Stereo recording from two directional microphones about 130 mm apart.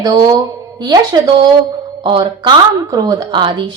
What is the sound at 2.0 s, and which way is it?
Speech, 40° right (ahead or behind).